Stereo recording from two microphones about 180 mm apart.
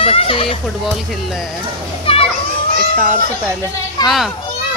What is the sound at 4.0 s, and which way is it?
Speech, 20° left (ahead or behind).